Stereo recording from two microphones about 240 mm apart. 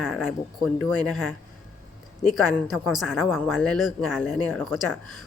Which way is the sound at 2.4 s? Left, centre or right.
Centre.